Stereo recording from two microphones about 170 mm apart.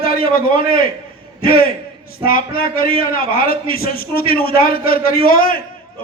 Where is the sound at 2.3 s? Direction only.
60° left (ahead or behind).